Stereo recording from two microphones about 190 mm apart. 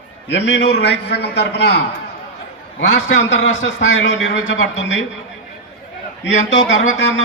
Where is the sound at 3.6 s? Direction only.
75° left (ahead or behind).